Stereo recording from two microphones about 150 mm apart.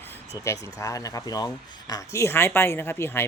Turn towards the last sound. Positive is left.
turn(degrees=15)  # may be behind; listen again after turning